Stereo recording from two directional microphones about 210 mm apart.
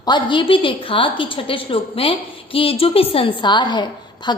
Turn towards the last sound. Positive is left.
turn(degrees=20)  # may be behind; listen again after turning